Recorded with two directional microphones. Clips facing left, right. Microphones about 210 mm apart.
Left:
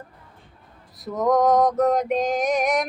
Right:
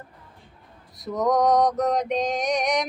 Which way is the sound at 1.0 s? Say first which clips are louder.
Left 2 dB; centre (ahead or behind).